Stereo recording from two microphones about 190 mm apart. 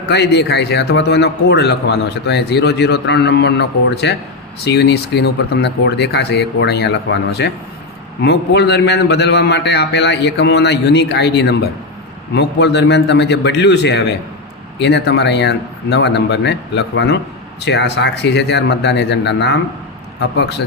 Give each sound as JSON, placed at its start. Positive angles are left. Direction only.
{"t": 0.1, "sound": "a man's voice", "side_deg": 60}